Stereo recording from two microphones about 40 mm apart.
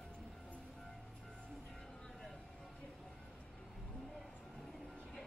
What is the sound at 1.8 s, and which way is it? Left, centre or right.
Vehicle, centre.